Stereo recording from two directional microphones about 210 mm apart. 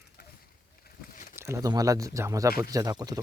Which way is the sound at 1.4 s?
15° right (ahead or behind).